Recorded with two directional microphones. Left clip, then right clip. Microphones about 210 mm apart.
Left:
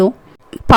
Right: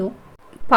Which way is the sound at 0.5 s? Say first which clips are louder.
Left 17 dB; 45° left (ahead or behind).